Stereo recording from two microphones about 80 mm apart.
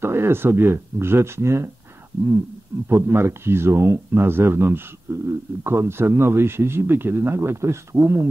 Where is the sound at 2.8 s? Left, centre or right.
Right.